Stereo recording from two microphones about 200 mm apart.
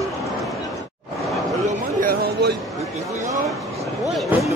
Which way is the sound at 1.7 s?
45° right (ahead or behind).